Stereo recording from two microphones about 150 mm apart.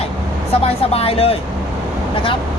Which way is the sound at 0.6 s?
40° left (ahead or behind).